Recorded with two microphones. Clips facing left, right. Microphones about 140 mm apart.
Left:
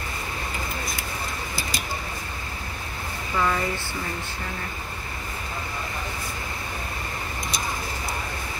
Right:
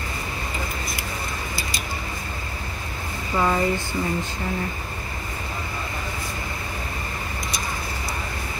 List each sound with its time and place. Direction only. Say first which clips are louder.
3.3 s speech: right 4 dB; 20° right (ahead or behind)